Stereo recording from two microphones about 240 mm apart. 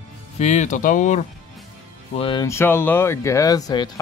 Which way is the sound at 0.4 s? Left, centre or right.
Left.